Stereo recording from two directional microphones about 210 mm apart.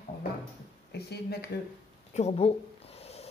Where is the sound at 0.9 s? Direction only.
50° left (ahead or behind).